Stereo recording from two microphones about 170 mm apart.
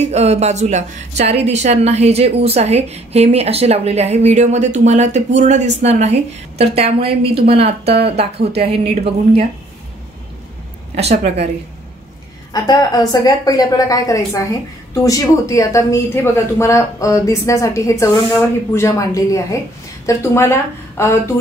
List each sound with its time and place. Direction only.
0.0 s a woman's voice: 40° right (ahead or behind)
7.8 s speech: 75° right (ahead or behind)
8.2 s a woman's voice: 35° right (ahead or behind)
12.5 s a woman's voice: 20° left (ahead or behind)